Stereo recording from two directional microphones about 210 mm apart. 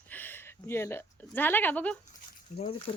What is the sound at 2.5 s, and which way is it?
Speech, 35° left (ahead or behind).